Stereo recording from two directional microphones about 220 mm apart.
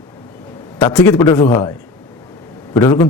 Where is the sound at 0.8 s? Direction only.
5° left (ahead or behind).